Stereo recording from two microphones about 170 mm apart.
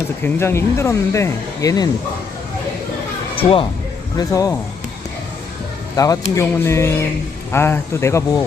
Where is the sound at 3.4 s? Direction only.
30° left (ahead or behind).